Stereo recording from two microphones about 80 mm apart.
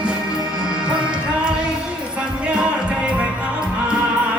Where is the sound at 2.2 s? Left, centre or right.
Centre.